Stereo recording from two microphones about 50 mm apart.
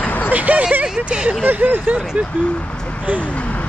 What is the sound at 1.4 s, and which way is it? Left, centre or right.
Speech, right.